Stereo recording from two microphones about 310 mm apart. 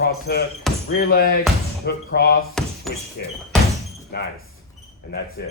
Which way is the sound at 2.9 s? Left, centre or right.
Centre.